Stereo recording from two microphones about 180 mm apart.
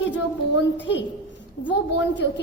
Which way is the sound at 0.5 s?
80° left.